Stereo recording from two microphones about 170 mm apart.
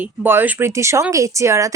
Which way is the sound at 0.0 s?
10° right (ahead or behind).